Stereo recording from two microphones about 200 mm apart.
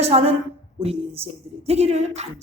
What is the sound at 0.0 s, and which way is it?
A woman's voice, 30° right (ahead or behind).